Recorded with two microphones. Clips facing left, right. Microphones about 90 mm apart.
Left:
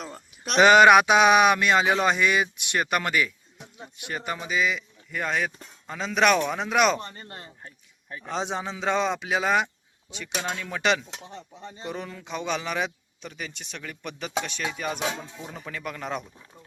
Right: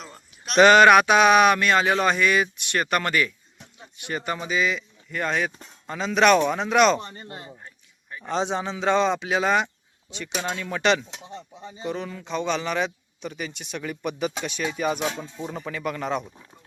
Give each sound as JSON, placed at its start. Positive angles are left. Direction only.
{"t": 0.5, "sound": "a man's voice", "side_deg": 10}
{"t": 7.0, "sound": "a man's voice", "side_deg": -20}
{"t": 8.2, "sound": "a man's voice", "side_deg": 0}